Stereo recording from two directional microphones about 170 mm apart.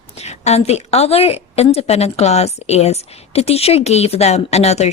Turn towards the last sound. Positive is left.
turn(degrees=40)  # may be behind; listen again after turning